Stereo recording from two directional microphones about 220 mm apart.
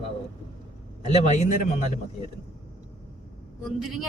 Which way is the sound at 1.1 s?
30° left (ahead or behind).